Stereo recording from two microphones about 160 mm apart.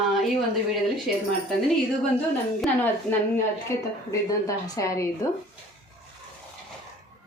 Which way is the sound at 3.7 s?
20° left (ahead or behind).